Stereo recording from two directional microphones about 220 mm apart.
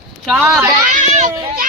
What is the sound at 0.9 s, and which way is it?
Speech, 35° right (ahead or behind).